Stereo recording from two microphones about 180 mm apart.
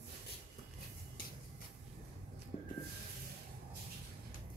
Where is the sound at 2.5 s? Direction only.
45° left (ahead or behind).